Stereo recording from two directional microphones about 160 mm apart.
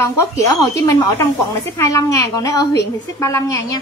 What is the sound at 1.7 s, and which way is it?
A woman's voice, 20° left (ahead or behind).